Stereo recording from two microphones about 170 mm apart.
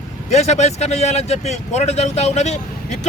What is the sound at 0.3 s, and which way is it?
Speech, 40° left (ahead or behind).